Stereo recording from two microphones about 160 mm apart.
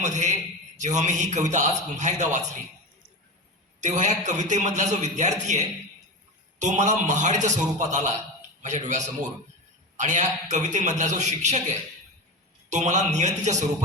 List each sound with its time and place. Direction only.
0.0 s a man's voice: 50° right (ahead or behind)
3.8 s a man's voice: 50° right (ahead or behind)